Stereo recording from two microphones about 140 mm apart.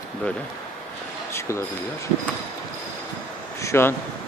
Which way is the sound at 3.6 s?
20° left (ahead or behind).